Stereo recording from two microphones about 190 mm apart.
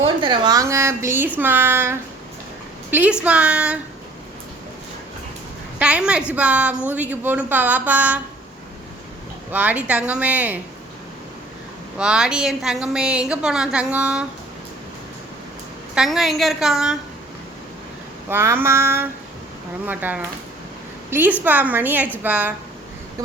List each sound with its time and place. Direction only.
0.2 s a woman's voice: 25° right (ahead or behind); by 3.8 s 5° right (ahead or behind)
5.8 s a woman's voice: 5° right (ahead or behind)
9.5 s speech: 10° right (ahead or behind)
11.9 s a woman's voice: 5° right (ahead or behind)
16.0 s a woman's voice: centre (ahead or behind)
18.3 s a woman's voice: 10° right (ahead or behind)